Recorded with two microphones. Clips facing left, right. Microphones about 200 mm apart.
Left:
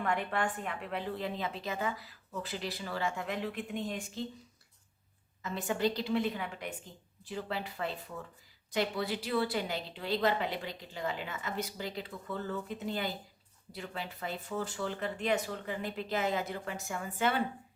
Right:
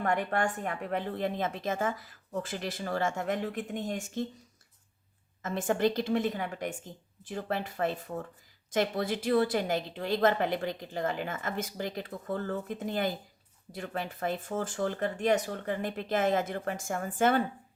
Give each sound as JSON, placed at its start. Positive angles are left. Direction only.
{"t": 0.0, "sound": "a woman's voice", "side_deg": -45}
{"t": 5.4, "sound": "a woman's voice", "side_deg": -50}